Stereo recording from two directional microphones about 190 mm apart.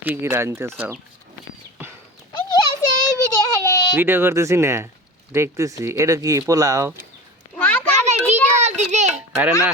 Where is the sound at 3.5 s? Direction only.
15° left (ahead or behind).